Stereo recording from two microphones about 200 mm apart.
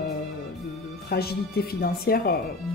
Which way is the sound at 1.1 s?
50° left (ahead or behind).